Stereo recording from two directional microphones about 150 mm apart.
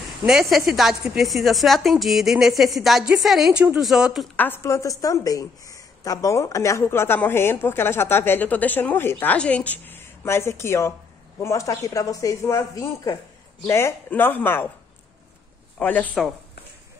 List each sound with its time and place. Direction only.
0.3 s a woman's voice: 5° right (ahead or behind)
4.4 s a woman's voice: 15° left (ahead or behind)
15.8 s a woman's voice: 10° left (ahead or behind)